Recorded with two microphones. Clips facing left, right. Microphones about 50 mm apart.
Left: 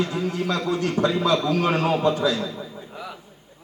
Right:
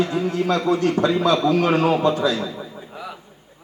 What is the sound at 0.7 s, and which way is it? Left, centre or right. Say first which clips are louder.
Speech: right 7 dB; centre.